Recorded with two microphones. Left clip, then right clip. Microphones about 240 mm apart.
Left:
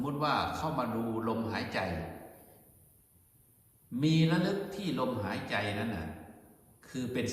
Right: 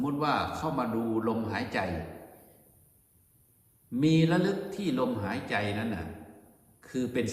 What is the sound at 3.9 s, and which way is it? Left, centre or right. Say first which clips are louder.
A man's voice: right 4 dB; centre.